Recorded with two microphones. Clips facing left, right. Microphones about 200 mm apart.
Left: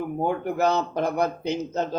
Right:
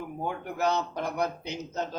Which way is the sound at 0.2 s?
45° left (ahead or behind).